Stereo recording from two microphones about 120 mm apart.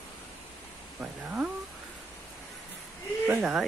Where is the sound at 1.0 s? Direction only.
10° right (ahead or behind).